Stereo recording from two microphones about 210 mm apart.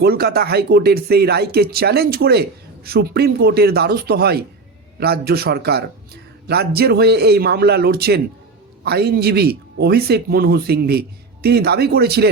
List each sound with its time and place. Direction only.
0.0 s speech: 50° right (ahead or behind)